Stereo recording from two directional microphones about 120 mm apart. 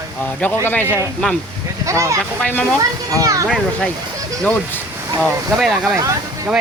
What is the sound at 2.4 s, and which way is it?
Speech, 10° left (ahead or behind).